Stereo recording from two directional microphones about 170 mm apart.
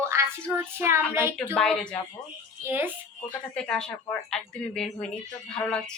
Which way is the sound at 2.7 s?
10° right (ahead or behind).